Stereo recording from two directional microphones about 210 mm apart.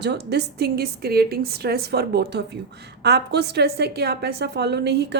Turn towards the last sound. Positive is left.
turn(degrees=-55)  # may be behind; listen again after turning